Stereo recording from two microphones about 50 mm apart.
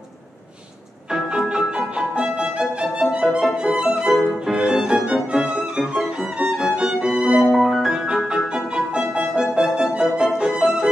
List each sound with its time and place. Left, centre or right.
1.5 s music: centre
3.1 s violin: centre
5.0 s music: centre
6.7 s violin: centre
7.4 s music: centre
8.4 s music: centre